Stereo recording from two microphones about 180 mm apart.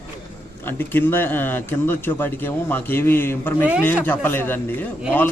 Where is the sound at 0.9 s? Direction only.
10° left (ahead or behind).